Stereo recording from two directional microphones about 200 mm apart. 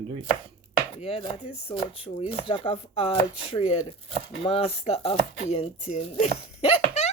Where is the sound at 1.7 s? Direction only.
30° left (ahead or behind).